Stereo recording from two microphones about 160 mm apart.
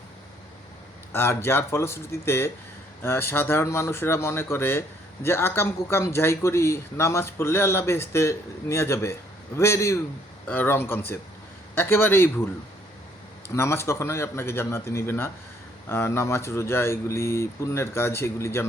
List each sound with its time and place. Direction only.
1.1 s speech: 15° left (ahead or behind)
13.5 s speech: 15° left (ahead or behind)